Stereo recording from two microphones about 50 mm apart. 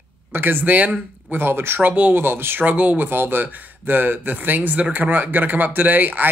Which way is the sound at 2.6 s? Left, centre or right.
Right.